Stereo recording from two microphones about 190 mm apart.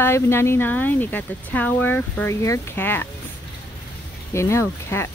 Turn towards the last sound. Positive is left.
turn(degrees=15)  # may be behind; listen again after turning